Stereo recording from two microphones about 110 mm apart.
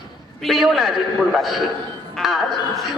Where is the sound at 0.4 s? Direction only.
Centre (ahead or behind).